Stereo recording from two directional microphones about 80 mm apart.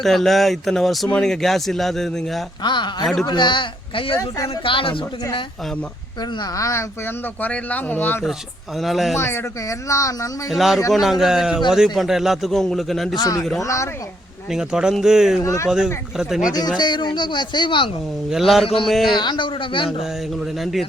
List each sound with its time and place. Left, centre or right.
0.0 s speech: centre
2.6 s a woman's voice: left
6.6 s speech: left
7.4 s speech: centre
8.8 s speech: centre
9.1 s speech: left
10.5 s speech: centre
13.1 s speech: left
14.5 s speech: centre
15.4 s speech: left
16.5 s speech: left
18.3 s speech: centre
19.1 s speech: left